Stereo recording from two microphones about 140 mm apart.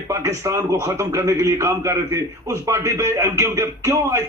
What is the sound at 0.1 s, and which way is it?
A man's voice, 20° right (ahead or behind).